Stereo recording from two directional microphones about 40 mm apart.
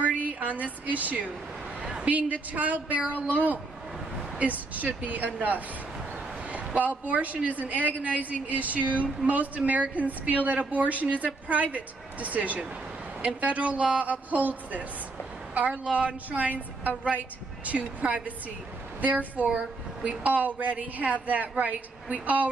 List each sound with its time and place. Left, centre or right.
0.0 s a woman's voice: right
4.4 s a woman's voice: right
6.4 s a sound: right
6.9 s a woman's voice: right